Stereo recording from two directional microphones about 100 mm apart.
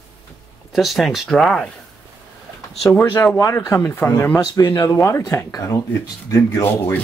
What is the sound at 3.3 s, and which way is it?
Speech, 30° left (ahead or behind).